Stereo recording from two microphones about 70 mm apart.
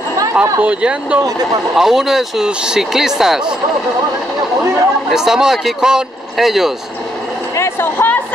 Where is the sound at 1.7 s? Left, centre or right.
Centre.